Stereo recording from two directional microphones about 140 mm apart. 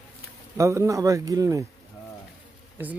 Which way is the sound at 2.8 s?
15° right (ahead or behind).